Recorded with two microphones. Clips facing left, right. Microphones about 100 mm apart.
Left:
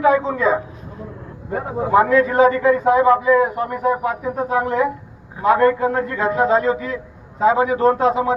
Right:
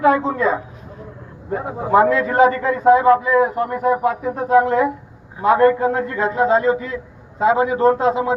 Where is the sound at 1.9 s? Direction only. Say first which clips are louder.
Even; 25° right (ahead or behind).